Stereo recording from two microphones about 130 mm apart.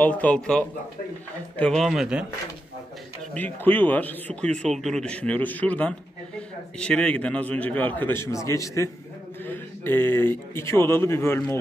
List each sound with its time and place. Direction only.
0.0 s a man's voice: 10° left (ahead or behind); by 2.2 s 5° right (ahead or behind)
3.3 s a man's voice: 15° left (ahead or behind)